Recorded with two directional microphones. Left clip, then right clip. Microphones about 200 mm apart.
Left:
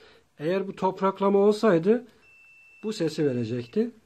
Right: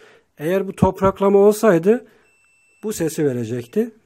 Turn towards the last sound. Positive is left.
turn(degrees=-40)  # may be behind; listen again after turning